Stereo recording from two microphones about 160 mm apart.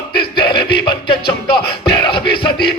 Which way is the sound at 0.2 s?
30° left (ahead or behind).